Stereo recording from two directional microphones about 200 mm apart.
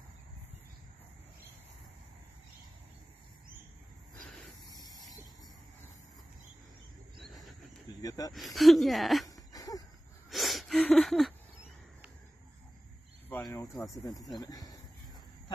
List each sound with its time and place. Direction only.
4.6 s spray: 20° left (ahead or behind)
8.0 s speech: 15° left (ahead or behind)
8.3 s speech: centre (ahead or behind)
9.3 s a sound: 15° left (ahead or behind)
10.3 s a sound: centre (ahead or behind)
13.4 s speech: 15° left (ahead or behind)